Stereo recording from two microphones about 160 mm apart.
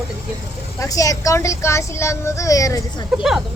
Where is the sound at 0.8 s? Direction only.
20° left (ahead or behind).